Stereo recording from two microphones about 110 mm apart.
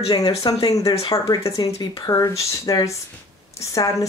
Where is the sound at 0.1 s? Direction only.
35° left (ahead or behind).